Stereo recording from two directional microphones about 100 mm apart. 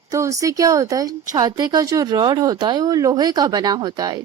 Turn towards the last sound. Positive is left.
turn(degrees=-45)  # may be behind; listen again after turning